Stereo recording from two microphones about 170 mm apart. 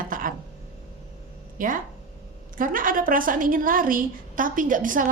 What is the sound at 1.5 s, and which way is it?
A woman's voice, 50° right (ahead or behind).